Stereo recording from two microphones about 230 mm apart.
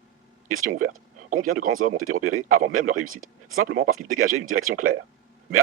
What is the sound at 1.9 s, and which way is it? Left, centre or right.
Speech, right.